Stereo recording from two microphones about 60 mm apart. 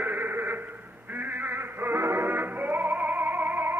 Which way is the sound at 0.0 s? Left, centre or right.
Right.